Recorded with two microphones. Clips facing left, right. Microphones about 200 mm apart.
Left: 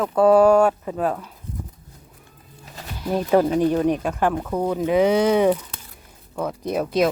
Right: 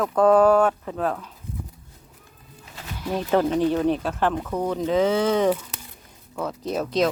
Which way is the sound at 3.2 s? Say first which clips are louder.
Left 3 dB; 10° left (ahead or behind).